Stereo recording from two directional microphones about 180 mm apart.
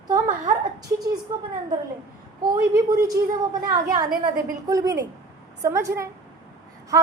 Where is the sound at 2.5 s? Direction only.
15° right (ahead or behind).